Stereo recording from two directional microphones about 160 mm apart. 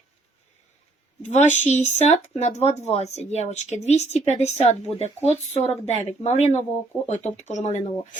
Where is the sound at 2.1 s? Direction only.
45° left (ahead or behind).